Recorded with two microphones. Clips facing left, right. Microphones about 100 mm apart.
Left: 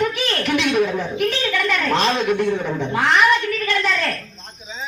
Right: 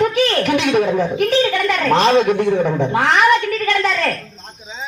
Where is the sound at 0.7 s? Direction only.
40° right (ahead or behind).